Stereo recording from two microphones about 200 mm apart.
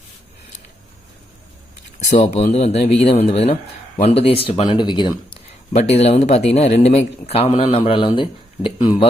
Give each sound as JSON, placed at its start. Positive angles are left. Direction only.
{"t": 2.0, "sound": "a man's voice", "side_deg": 35}